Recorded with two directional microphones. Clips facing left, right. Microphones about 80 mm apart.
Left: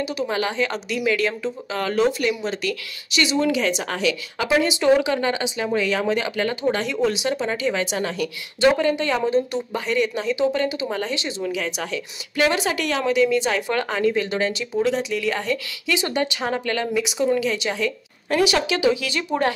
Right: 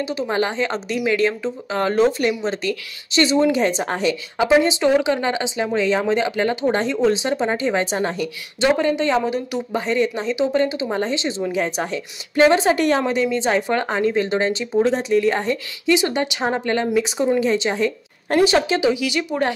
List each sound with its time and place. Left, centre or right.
0.0 s speech: right
9.8 s speech: right
18.9 s speech: centre